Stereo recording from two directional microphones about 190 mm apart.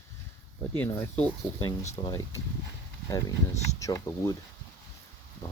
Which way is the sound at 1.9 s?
20° left (ahead or behind).